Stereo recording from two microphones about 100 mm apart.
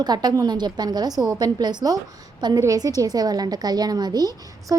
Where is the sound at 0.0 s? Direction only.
45° right (ahead or behind).